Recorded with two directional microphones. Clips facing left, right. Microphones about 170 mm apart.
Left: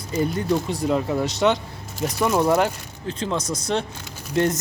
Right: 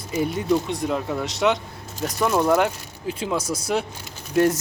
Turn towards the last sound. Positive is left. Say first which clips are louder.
# right 2 dB
turn(degrees=-5)  # may be behind; listen again after turning